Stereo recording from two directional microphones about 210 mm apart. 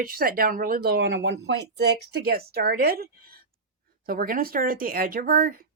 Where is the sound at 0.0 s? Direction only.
45° right (ahead or behind).